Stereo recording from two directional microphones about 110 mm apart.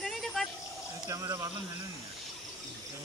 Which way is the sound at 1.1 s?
25° right (ahead or behind).